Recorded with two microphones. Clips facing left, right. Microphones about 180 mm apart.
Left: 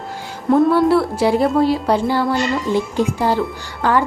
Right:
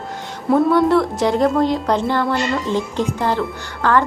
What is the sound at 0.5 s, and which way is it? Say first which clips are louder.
Speech: left 1 dB; 5° left (ahead or behind).